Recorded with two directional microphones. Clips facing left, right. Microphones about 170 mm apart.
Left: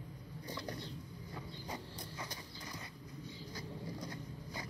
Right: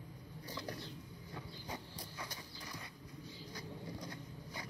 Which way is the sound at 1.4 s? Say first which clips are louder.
Left 1 dB; centre (ahead or behind).